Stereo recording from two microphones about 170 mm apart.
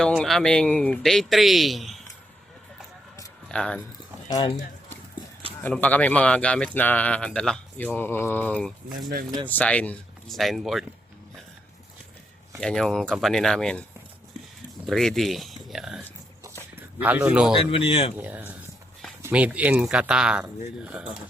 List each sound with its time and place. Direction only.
0.0 s speech: centre (ahead or behind)
3.5 s speech: 5° left (ahead or behind)
5.6 s speech: 10° left (ahead or behind)
12.5 s speech: 5° left (ahead or behind)
14.8 s speech: centre (ahead or behind)
17.7 s speech: 30° left (ahead or behind)
18.2 s speech: 10° right (ahead or behind)